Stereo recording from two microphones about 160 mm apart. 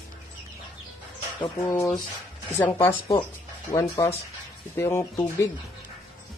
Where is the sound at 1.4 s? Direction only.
20° left (ahead or behind).